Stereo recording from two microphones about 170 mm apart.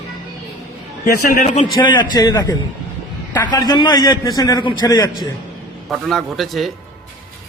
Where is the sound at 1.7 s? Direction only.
25° left (ahead or behind).